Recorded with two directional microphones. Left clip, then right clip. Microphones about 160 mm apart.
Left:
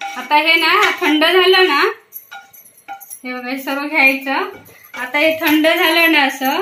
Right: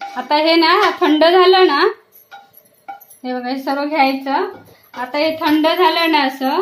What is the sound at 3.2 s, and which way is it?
A woman's voice, 70° right (ahead or behind).